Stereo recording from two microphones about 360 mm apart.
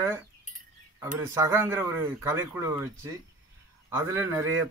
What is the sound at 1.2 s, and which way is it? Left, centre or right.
A man's voice, centre.